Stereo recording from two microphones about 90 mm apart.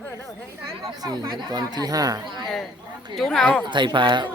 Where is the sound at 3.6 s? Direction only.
60° right (ahead or behind).